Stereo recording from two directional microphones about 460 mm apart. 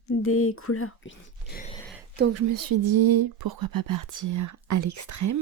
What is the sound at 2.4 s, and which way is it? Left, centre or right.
Speech, right.